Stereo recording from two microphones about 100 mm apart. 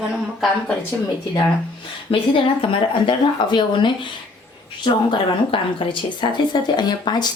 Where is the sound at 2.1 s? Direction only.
65° left (ahead or behind).